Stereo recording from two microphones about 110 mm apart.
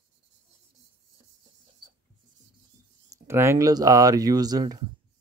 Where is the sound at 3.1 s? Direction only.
25° right (ahead or behind).